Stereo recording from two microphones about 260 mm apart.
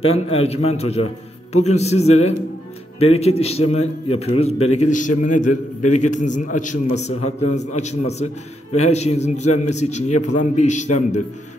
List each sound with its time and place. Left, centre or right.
0.0 s a man's voice: left
10.1 s a man's voice: left
10.5 s a man's voice: left